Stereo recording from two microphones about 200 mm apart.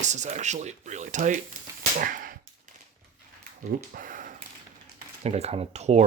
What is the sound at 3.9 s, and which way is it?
Speech, 45° right (ahead or behind).